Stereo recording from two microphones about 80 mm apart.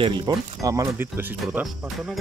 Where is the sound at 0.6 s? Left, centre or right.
Right.